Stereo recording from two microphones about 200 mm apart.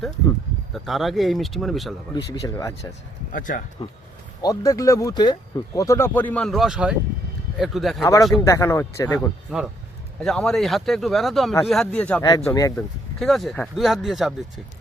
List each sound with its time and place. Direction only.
0.7 s speech: centre (ahead or behind)
2.3 s speech: 15° left (ahead or behind)
3.3 s speech: 40° left (ahead or behind)
3.8 s speech: 25° left (ahead or behind); by 8.0 s centre (ahead or behind)
8.0 s speech: 15° left (ahead or behind)
9.5 s speech: 5° right (ahead or behind); by 12.8 s 15° left (ahead or behind)
13.1 s speech: centre (ahead or behind)